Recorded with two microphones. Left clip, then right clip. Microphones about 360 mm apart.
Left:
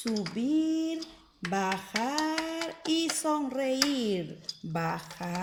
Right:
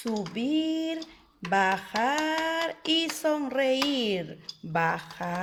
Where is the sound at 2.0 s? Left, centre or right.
Right.